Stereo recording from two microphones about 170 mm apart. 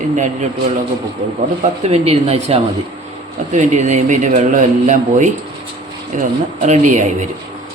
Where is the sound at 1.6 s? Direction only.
40° right (ahead or behind).